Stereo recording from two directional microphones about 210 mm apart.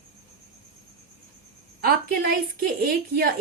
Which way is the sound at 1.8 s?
45° right (ahead or behind).